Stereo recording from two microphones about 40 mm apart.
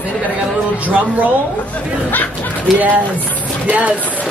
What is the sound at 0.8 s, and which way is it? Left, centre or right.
Speech, right.